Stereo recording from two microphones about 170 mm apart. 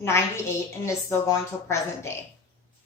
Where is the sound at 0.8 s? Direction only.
15° left (ahead or behind).